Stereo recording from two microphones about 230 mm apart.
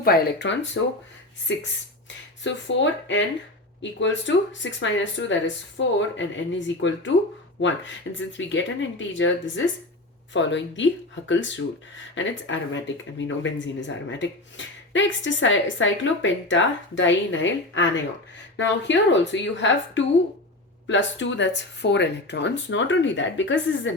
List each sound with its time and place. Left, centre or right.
0.0 s speech: left
8.3 s speech: left